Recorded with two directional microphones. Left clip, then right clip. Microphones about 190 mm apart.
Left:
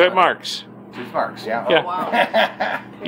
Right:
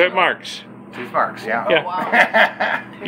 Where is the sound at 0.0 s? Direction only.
10° left (ahead or behind).